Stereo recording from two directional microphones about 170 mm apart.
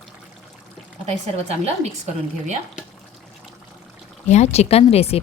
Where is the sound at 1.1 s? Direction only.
40° right (ahead or behind).